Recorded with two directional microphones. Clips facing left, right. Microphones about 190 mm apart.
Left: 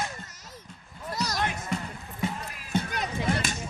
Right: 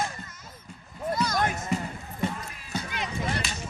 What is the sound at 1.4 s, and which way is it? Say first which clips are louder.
Music: right 3 dB; 45° right (ahead or behind).